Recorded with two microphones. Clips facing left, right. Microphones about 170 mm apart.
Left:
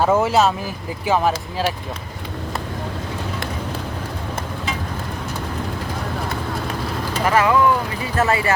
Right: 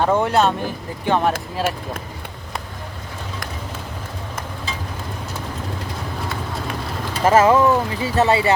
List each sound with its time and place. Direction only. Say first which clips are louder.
0.0 s speech: left 1 dB; 5° left (ahead or behind)
7.3 s speech: right 3 dB; 25° right (ahead or behind)